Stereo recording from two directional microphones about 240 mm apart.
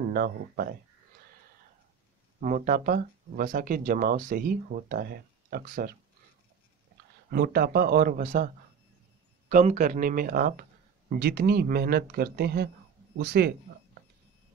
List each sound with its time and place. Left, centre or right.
0.0 s speech: right
2.4 s speech: right
7.2 s speech: right
9.5 s speech: right